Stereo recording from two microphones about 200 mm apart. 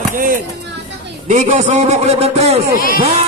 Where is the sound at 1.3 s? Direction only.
35° right (ahead or behind).